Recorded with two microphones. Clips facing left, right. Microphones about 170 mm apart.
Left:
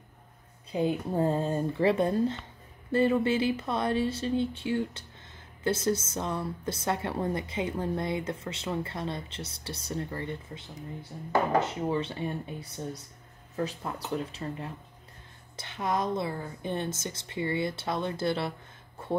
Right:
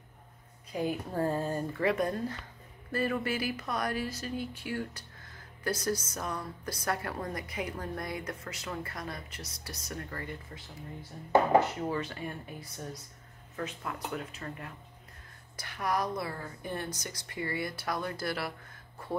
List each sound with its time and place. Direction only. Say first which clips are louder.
0.7 s speech: left 5 dB; 25° left (ahead or behind)